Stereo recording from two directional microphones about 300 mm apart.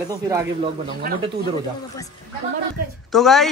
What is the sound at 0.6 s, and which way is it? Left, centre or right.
Speech, right.